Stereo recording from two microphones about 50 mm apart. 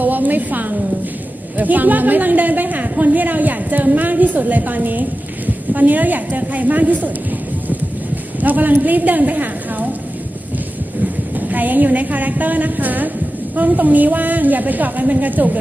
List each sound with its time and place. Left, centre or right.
0.0 s a woman's voice: right
8.4 s a woman's voice: right
11.3 s a woman's voice: right